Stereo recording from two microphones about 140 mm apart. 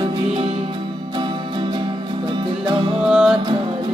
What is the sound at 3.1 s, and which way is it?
Music, 5° right (ahead or behind).